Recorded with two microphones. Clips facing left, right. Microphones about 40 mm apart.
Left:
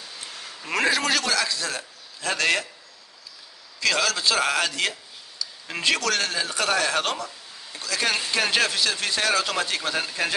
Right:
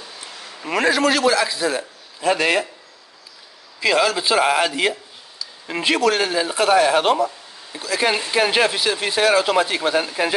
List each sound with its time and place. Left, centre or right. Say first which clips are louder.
0.2 s a man's voice: right 4 dB; centre
3.8 s speech: right 5 dB; centre